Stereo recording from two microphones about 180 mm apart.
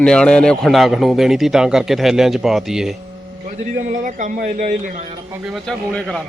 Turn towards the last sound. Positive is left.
turn(degrees=0)  # may be behind; listen again after turning